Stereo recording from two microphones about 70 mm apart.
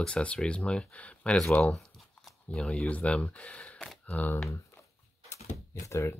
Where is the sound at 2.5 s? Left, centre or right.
Centre.